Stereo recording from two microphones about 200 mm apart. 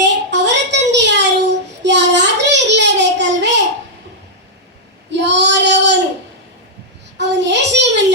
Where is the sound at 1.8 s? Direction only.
60° right (ahead or behind).